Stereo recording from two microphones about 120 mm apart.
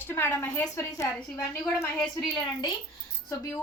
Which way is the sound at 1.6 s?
Centre (ahead or behind).